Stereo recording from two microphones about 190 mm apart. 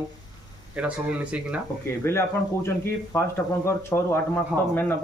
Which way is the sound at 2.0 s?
15° left (ahead or behind).